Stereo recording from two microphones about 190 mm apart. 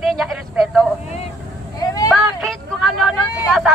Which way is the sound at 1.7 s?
20° left (ahead or behind).